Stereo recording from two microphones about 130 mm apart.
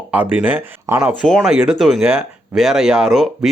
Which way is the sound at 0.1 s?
10° right (ahead or behind).